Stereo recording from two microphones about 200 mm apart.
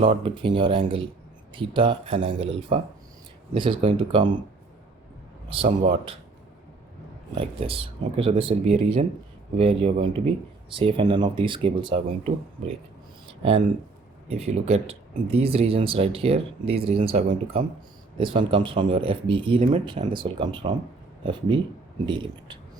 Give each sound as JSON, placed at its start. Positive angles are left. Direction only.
{"t": 0.0, "sound": "speech", "side_deg": -25}
{"t": 5.5, "sound": "speech", "side_deg": -25}
{"t": 7.3, "sound": "speech", "side_deg": -25}
{"t": 13.4, "sound": "speech", "side_deg": -30}
{"t": 22.0, "sound": "speech", "side_deg": -25}